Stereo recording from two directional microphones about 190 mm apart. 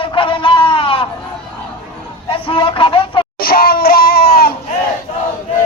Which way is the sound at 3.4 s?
50° left (ahead or behind).